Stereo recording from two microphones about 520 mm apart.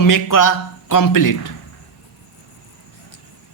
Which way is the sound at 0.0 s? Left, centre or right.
Left.